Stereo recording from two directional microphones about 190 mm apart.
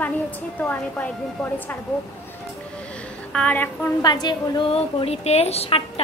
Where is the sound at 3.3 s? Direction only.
10° left (ahead or behind).